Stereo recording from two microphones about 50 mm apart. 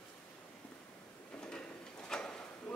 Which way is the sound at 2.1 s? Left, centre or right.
Centre.